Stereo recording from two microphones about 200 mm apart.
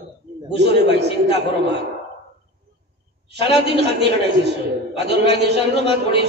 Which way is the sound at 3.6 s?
55° right (ahead or behind).